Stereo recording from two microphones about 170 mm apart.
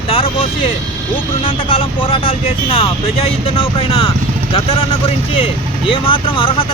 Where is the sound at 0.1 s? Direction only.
35° left (ahead or behind).